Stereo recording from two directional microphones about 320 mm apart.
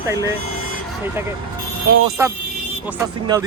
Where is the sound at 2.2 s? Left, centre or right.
Centre.